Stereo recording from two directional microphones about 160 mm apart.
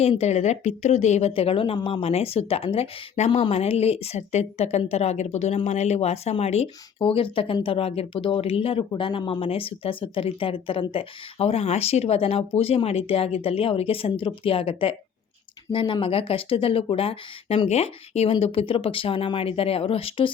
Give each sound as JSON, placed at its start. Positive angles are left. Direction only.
{"t": 0.0, "sound": "speech", "side_deg": 40}